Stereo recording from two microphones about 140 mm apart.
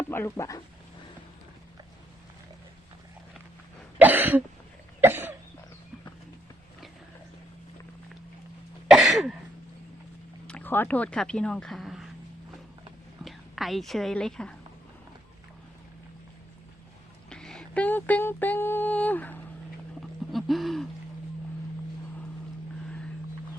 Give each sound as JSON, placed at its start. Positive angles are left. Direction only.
{"t": 0.1, "sound": "speech", "side_deg": 20}
{"t": 3.9, "sound": "cough", "side_deg": -10}
{"t": 8.9, "sound": "throat clearing", "side_deg": 0}
{"t": 10.4, "sound": "speech", "side_deg": 10}
{"t": 13.2, "sound": "a woman's voice", "side_deg": 0}
{"t": 17.2, "sound": "a sound", "side_deg": 5}
{"t": 20.0, "sound": "a sound", "side_deg": 0}